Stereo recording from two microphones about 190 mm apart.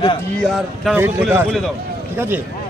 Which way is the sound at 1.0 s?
10° right (ahead or behind).